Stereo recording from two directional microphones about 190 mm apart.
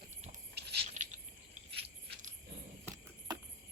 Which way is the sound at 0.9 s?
40° right (ahead or behind).